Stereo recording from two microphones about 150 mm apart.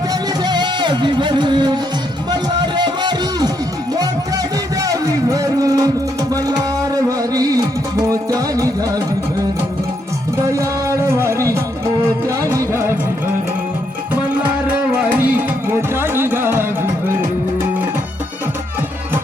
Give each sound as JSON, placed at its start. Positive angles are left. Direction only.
{"t": 0.1, "sound": "music", "side_deg": -30}
{"t": 4.8, "sound": "music", "side_deg": -25}
{"t": 10.4, "sound": "music", "side_deg": -20}
{"t": 14.7, "sound": "music", "side_deg": -10}